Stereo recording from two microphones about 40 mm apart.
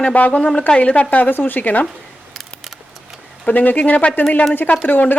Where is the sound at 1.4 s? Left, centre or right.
Left.